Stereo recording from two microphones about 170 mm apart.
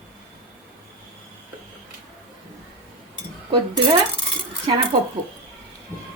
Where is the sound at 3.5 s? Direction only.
25° right (ahead or behind).